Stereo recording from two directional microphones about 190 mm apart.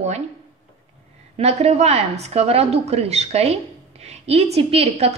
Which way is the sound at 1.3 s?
35° right (ahead or behind).